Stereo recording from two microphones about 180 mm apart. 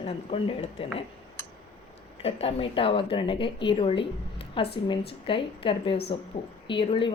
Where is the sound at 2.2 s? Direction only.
30° left (ahead or behind).